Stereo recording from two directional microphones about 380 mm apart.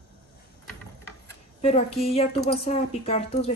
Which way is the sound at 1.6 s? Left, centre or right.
Centre.